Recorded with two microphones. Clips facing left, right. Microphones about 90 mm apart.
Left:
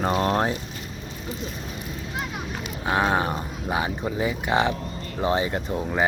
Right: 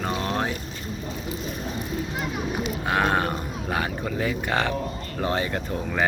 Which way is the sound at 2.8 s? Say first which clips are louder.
Left 1 dB; 15° left (ahead or behind).